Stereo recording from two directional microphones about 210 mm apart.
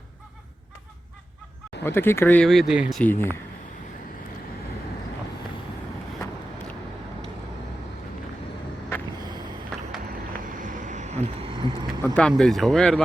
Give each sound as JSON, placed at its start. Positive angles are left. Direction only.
{"t": 1.8, "sound": "speech", "side_deg": 10}
{"t": 3.0, "sound": "speech", "side_deg": 10}
{"t": 10.6, "sound": "vehicle", "side_deg": -35}
{"t": 12.0, "sound": "speech", "side_deg": 5}